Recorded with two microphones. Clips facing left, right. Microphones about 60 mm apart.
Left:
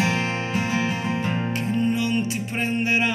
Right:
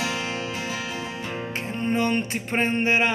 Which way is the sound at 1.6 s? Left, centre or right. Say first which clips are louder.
Even; right.